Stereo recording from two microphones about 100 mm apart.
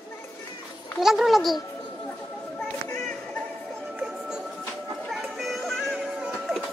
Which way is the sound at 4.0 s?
5° right (ahead or behind).